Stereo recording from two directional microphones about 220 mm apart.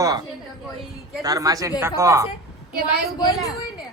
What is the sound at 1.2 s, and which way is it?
A man's voice, 15° right (ahead or behind).